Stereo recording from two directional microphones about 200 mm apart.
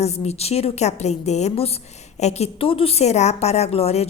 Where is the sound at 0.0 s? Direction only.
30° left (ahead or behind).